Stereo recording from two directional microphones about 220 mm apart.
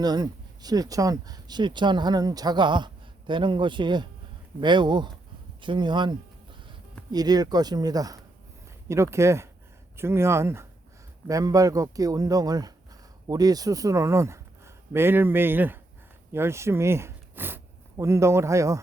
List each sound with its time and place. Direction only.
0.0 s a man's voice: 20° right (ahead or behind)